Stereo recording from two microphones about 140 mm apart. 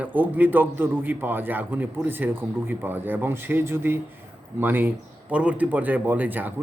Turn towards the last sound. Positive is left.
turn(degrees=-15)  # may be behind; listen again after turning